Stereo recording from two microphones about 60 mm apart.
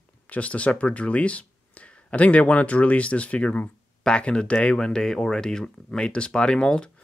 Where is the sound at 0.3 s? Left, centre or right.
Left.